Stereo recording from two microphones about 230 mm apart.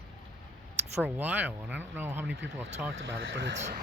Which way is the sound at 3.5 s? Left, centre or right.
Right.